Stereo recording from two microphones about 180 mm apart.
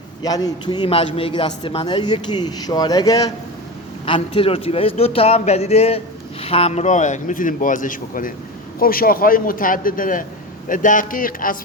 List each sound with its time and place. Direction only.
0.2 s a man's voice: 20° left (ahead or behind)
4.0 s a man's voice: 30° left (ahead or behind); by 11.5 s 50° left (ahead or behind)